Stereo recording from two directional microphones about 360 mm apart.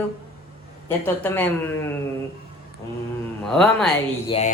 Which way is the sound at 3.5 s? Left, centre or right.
Centre.